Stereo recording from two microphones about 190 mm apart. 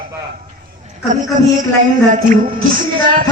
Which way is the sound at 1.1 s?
40° right (ahead or behind).